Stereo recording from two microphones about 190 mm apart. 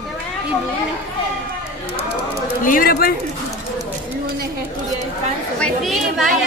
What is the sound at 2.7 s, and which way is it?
Speech, 50° left (ahead or behind).